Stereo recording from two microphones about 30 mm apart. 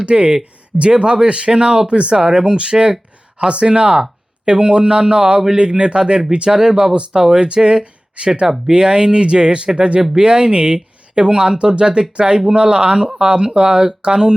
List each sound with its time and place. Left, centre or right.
0.0 s speech: right
6.5 s speech: right
10.0 s speech: right